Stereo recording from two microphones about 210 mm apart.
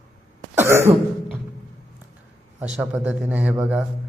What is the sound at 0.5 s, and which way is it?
Cough, 10° right (ahead or behind).